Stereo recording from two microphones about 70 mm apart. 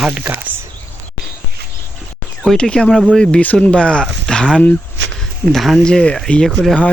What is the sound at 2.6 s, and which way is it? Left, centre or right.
Speech, centre.